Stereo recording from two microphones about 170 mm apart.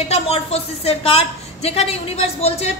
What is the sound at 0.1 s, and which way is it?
A woman's voice, 35° left (ahead or behind).